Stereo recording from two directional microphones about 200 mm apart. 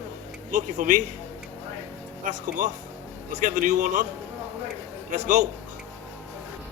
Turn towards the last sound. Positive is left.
turn(degrees=-40)  # may be behind; listen again after turning